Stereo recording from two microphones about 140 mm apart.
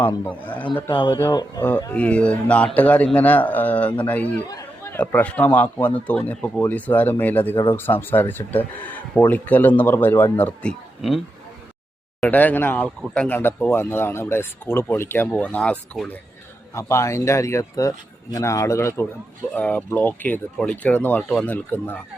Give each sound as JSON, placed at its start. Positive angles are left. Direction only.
{"t": 0.3, "sound": "a man's voice", "side_deg": 10}
{"t": 0.9, "sound": "speech", "side_deg": 35}
{"t": 1.9, "sound": "a man's voice", "side_deg": 10}
{"t": 4.4, "sound": "a man's voice", "side_deg": 20}
{"t": 12.2, "sound": "a man's voice", "side_deg": 10}